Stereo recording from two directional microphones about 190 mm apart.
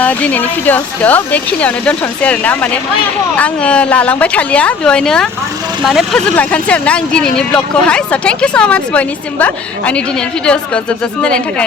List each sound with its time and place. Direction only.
0.0 s speech: 10° left (ahead or behind)